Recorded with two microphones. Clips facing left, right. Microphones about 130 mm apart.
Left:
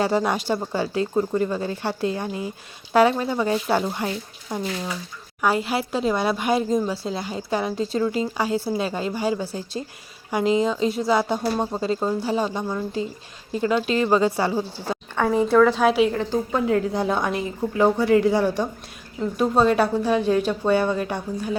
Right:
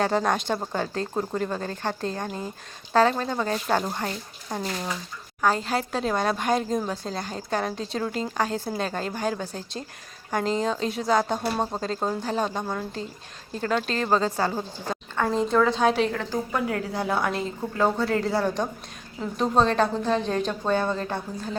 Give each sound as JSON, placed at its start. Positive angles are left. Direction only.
{"t": 0.0, "sound": "speech", "side_deg": 5}
{"t": 1.7, "sound": "a woman's voice", "side_deg": 10}
{"t": 11.5, "sound": "speech", "side_deg": -10}
{"t": 12.2, "sound": "a woman's voice", "side_deg": 5}
{"t": 16.1, "sound": "a woman's voice", "side_deg": 20}